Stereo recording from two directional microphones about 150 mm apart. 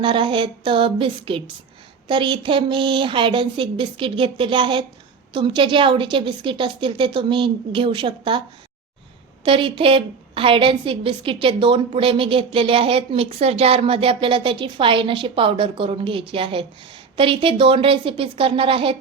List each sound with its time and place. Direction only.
0.0 s a woman's voice: 35° right (ahead or behind)